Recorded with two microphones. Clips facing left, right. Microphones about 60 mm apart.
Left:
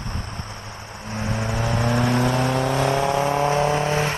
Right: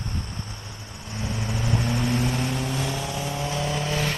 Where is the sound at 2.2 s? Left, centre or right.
Left.